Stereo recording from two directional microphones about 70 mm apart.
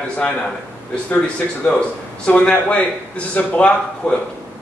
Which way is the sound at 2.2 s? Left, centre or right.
Centre.